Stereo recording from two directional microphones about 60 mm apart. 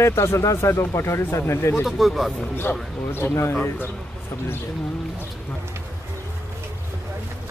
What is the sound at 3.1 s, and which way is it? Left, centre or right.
Speech, left.